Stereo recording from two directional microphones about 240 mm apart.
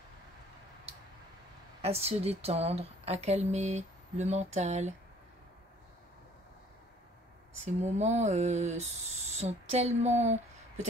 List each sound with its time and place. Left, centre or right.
1.8 s speech: right
7.5 s speech: right